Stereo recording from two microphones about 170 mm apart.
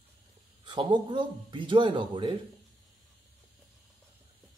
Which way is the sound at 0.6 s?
25° right (ahead or behind).